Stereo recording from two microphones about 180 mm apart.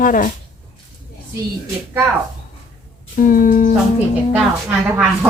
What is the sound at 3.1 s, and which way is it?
Speech, 50° left (ahead or behind).